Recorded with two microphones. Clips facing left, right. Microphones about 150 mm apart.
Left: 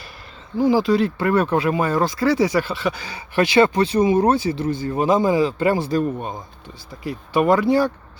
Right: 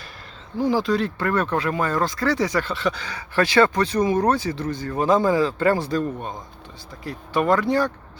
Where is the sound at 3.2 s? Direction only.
20° left (ahead or behind).